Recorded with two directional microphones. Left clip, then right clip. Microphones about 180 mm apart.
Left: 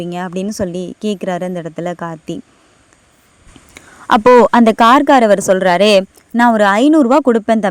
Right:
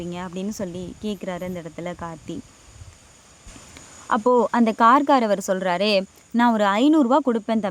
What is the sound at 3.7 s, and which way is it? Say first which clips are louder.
Speech: left 11 dB; 45° left (ahead or behind).